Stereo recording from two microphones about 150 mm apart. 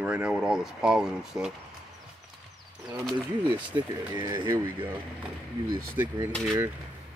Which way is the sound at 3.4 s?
30° right (ahead or behind).